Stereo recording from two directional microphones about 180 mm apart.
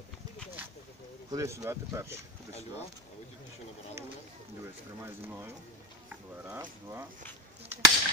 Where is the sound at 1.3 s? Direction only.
20° right (ahead or behind).